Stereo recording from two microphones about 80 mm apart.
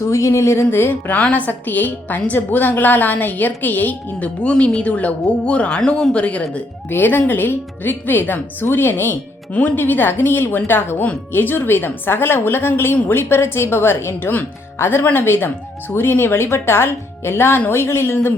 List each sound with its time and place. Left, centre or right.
0.0 s a woman's voice: left